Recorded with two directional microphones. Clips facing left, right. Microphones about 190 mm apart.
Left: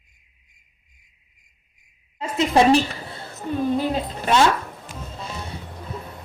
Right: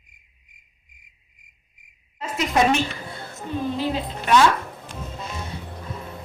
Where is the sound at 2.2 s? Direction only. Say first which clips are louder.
Left 3 dB; 30° left (ahead or behind).